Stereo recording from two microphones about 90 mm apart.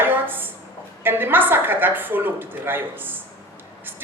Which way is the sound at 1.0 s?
25° right (ahead or behind).